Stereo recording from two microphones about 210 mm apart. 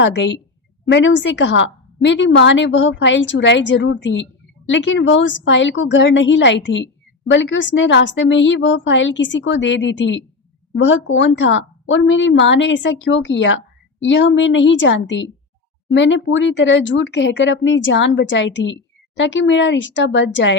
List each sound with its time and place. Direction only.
0.0 s a woman's voice: 60° left (ahead or behind)